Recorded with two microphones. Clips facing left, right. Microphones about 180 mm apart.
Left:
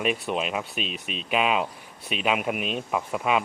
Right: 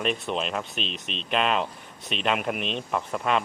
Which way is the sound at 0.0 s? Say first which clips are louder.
Left 1 dB; 10° left (ahead or behind).